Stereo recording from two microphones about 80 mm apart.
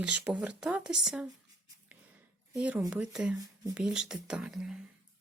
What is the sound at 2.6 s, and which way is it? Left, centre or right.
Speech, centre.